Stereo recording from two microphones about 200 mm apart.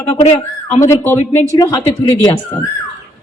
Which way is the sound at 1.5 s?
15° left (ahead or behind).